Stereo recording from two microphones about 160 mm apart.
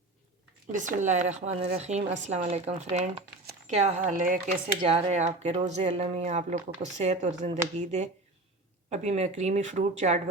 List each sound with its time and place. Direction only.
0.7 s speech: 55° right (ahead or behind)
4.9 s speech: 45° right (ahead or behind)